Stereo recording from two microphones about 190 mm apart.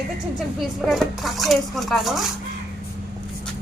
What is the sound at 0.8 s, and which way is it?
Speech, centre (ahead or behind).